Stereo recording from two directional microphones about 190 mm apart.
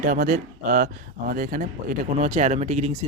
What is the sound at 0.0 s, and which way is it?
Speech, 45° right (ahead or behind).